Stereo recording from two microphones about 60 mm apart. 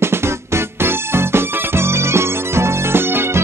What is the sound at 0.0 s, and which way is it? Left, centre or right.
Music, right.